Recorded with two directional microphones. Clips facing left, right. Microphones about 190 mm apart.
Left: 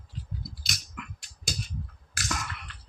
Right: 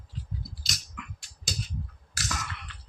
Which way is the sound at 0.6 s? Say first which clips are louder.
Left 1 dB; 55° left (ahead or behind).